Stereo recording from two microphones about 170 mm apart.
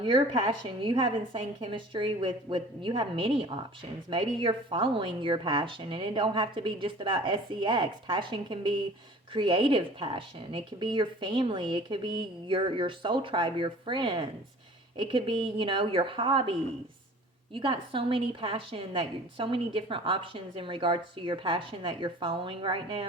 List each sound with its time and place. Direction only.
0.0 s a woman's voice: 30° right (ahead or behind)